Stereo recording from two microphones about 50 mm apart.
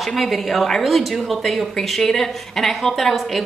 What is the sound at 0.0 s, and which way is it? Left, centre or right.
A woman's voice, centre.